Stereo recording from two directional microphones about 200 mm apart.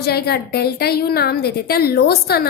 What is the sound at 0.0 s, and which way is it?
A woman's voice, 55° left (ahead or behind).